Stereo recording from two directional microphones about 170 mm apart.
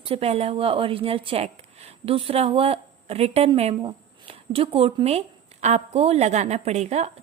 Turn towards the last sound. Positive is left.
turn(degrees=-40)  # may be behind; listen again after turning